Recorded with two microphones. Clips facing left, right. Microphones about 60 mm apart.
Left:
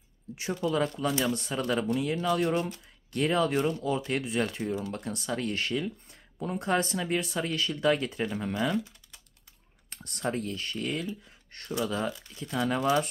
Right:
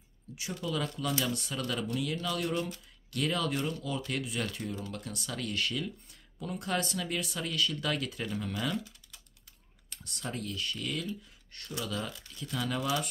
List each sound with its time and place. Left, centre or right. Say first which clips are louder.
0.6 s speech: left 6 dB; left
9.8 s speech: left 8 dB; left
11.2 s a sound: left 3 dB; left
11.8 s speech: left 6 dB; left
12.4 s speech: left 5 dB; left